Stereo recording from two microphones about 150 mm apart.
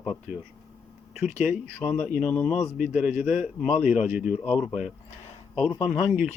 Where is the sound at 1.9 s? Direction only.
55° left (ahead or behind).